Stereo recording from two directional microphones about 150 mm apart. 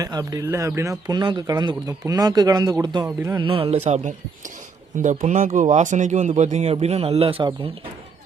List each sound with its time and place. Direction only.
0.0 s speech: 25° right (ahead or behind)